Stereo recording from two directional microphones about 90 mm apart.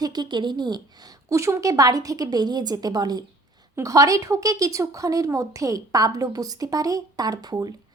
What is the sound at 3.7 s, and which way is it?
Speech, 40° right (ahead or behind).